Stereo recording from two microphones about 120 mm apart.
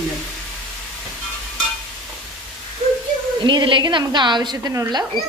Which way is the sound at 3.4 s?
45° right (ahead or behind).